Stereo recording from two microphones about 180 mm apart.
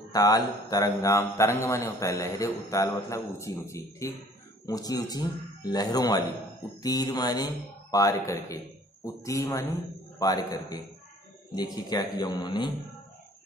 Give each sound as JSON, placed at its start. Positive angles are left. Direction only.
{"t": 0.1, "sound": "a man's voice", "side_deg": 20}